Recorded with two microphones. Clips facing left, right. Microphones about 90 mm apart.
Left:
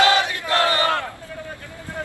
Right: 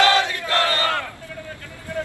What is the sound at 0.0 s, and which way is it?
Crowd, 20° left (ahead or behind).